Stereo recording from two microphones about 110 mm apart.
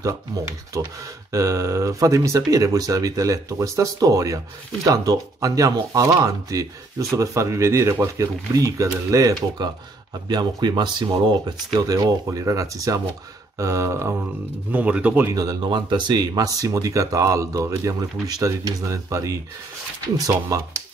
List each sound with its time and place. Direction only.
0.0 s speech: 30° right (ahead or behind)
14.7 s speech: 10° right (ahead or behind)
15.3 s speech: 40° right (ahead or behind)